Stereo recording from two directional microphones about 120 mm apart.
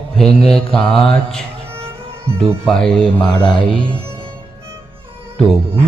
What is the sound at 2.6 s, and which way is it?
Speech, 5° left (ahead or behind).